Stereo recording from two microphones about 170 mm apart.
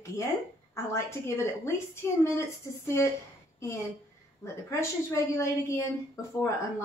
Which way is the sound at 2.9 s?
15° left (ahead or behind).